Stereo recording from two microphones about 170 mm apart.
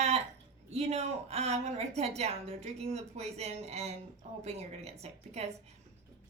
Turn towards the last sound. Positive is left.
turn(degrees=-40)  # may be behind; listen again after turning